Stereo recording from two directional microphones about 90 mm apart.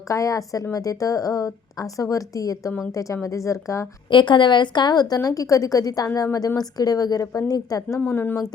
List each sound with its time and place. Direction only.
0.1 s a woman's voice: 40° left (ahead or behind)
4.1 s a woman's voice: 60° left (ahead or behind); by 7.9 s 40° left (ahead or behind)
7.9 s speech: 25° left (ahead or behind)